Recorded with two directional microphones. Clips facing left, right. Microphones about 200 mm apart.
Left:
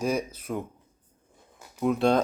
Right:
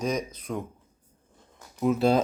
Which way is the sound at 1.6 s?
5° left (ahead or behind).